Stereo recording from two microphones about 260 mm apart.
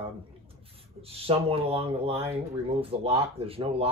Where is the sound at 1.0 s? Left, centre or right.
Right.